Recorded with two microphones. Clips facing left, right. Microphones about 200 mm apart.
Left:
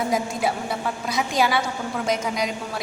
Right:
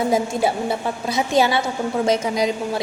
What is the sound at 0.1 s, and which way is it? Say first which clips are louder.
A woman's voice: right 4 dB; 25° right (ahead or behind).